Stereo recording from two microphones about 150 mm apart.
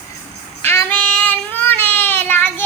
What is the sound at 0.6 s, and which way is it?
Child singing, 15° left (ahead or behind).